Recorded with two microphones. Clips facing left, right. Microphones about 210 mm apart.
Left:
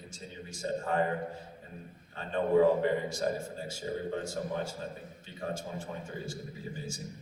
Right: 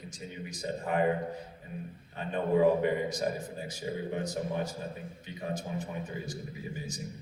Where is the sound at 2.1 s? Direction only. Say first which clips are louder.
Left 2 dB; 15° right (ahead or behind).